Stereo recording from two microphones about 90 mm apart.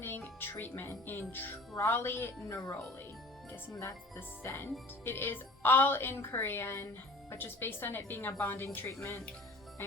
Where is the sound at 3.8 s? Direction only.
25° left (ahead or behind).